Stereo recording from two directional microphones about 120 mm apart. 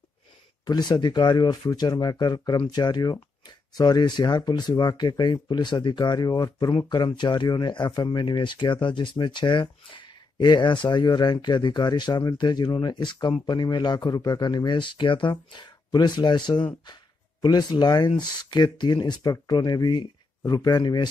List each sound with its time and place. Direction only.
0.7 s speech: 35° left (ahead or behind)